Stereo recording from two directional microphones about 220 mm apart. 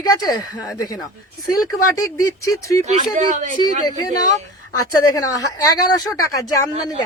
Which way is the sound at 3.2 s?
35° right (ahead or behind).